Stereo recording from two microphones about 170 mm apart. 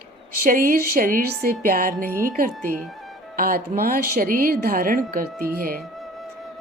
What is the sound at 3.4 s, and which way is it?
A woman's voice, 60° right (ahead or behind).